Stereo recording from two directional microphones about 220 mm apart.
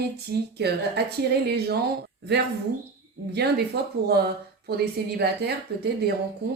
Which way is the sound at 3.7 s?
50° right (ahead or behind).